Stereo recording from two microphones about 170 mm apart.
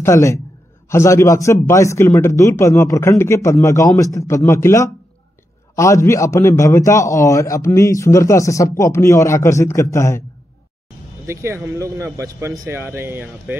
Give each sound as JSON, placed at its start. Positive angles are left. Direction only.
{"t": 0.0, "sound": "a man's voice", "side_deg": 20}
{"t": 11.2, "sound": "speech", "side_deg": -15}